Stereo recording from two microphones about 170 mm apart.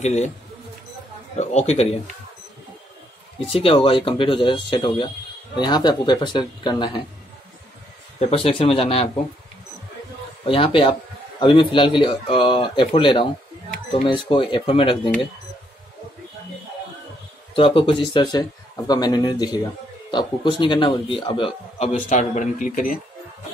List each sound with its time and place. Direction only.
0.0 s speech: 40° left (ahead or behind)
1.4 s a man's voice: 40° left (ahead or behind)
3.4 s a man's voice: 30° left (ahead or behind)
8.2 s a man's voice: 35° left (ahead or behind)
10.4 s a man's voice: 30° left (ahead or behind)
17.6 s a man's voice: 30° left (ahead or behind); by 22.9 s 50° left (ahead or behind)